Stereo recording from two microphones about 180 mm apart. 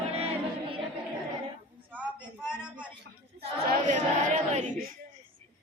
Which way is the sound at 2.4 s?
5° right (ahead or behind).